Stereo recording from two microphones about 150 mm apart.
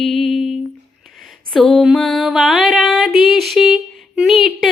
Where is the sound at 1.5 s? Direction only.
Centre (ahead or behind).